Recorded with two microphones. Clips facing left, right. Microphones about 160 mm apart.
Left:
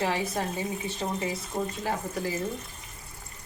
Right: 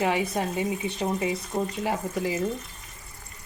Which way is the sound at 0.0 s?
15° right (ahead or behind).